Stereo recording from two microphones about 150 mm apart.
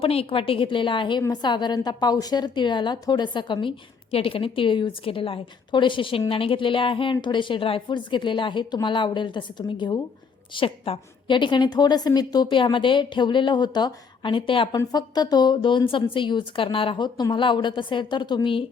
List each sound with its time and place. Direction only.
0.0 s a woman's voice: 40° left (ahead or behind)